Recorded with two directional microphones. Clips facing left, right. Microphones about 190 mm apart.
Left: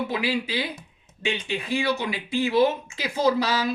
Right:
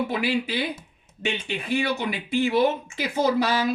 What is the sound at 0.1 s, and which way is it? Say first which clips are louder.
Speech: right 1 dB; 55° right (ahead or behind).